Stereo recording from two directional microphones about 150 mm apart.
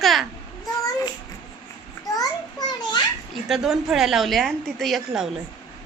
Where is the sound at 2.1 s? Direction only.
25° left (ahead or behind).